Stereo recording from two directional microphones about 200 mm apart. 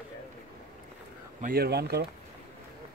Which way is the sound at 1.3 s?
45° right (ahead or behind).